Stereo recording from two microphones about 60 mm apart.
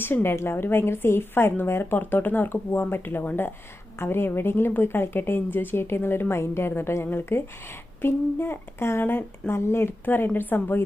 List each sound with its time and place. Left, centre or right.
0.0 s speech: left